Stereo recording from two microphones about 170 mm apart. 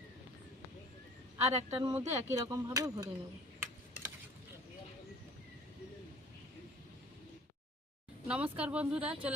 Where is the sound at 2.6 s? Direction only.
20° right (ahead or behind).